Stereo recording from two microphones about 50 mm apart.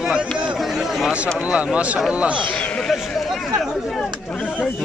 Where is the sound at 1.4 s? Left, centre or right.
Right.